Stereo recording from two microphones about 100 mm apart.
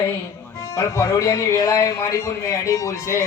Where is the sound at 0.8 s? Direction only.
30° left (ahead or behind).